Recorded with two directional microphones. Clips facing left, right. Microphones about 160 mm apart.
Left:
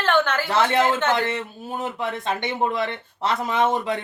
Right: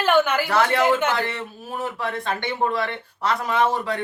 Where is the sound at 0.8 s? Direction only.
10° right (ahead or behind).